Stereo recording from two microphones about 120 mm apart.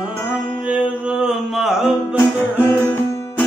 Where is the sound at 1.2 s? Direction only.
Centre (ahead or behind).